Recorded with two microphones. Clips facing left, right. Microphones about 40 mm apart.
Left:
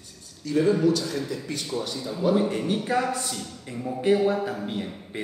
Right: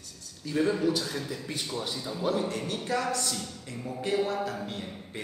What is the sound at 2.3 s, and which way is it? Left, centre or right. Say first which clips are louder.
A man's voice: left 7 dB; left.